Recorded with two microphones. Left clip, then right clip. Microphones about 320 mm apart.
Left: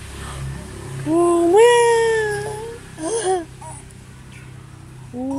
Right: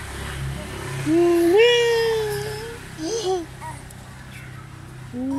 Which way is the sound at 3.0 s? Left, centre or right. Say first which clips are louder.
Left 3 dB; left.